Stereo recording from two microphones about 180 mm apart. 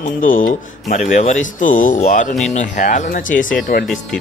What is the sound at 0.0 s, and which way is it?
Speech, 45° left (ahead or behind).